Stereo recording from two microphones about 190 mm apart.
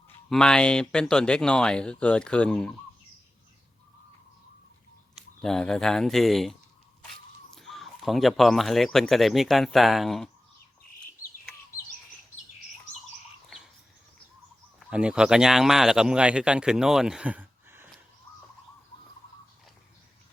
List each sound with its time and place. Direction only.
0.3 s speech: 5° left (ahead or behind)
5.1 s speech: centre (ahead or behind)
14.8 s speech: 5° right (ahead or behind)
18.3 s bird: 25° left (ahead or behind)